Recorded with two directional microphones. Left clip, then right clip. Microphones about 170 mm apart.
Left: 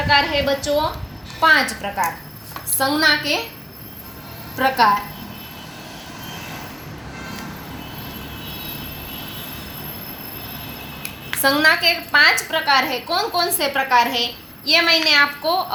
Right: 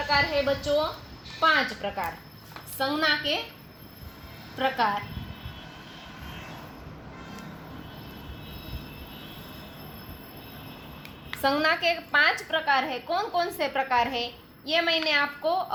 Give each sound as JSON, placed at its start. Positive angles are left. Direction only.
{"t": 0.1, "sound": "a woman's voice", "side_deg": -45}
{"t": 4.5, "sound": "a woman's voice", "side_deg": -35}
{"t": 11.4, "sound": "a woman's voice", "side_deg": -55}